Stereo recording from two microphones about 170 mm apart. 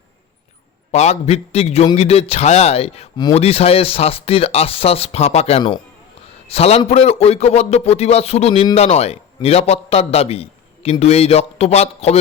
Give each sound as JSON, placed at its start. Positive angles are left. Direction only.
{"t": 0.9, "sound": "a man's voice", "side_deg": 40}